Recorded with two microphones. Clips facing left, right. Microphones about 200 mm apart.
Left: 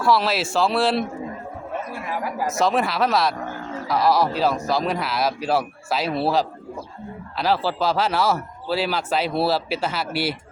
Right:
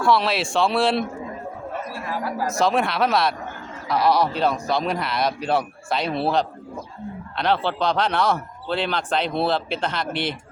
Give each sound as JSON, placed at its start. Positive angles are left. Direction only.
{"t": 0.0, "sound": "speech", "side_deg": 0}
{"t": 2.0, "sound": "speech", "side_deg": 15}
{"t": 2.5, "sound": "speech", "side_deg": 0}